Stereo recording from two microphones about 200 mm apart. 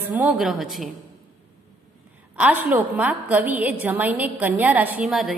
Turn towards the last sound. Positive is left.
turn(degrees=0)  # may be behind; listen again after turning